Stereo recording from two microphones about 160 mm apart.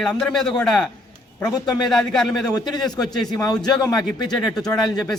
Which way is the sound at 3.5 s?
25° left (ahead or behind).